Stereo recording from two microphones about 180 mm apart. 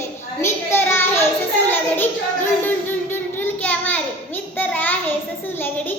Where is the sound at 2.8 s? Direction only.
10° left (ahead or behind).